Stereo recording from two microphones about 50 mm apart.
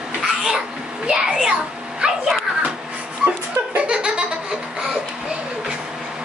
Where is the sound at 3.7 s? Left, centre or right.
Right.